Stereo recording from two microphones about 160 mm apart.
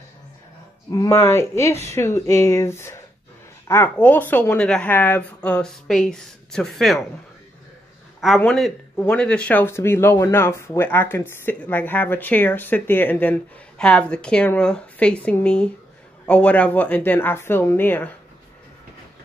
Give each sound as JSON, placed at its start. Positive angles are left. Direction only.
{"t": 0.9, "sound": "speech", "side_deg": 15}
{"t": 8.4, "sound": "speech", "side_deg": 5}